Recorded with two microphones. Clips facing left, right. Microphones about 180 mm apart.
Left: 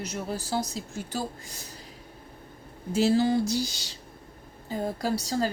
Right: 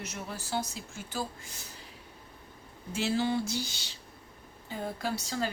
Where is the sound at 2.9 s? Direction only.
40° left (ahead or behind).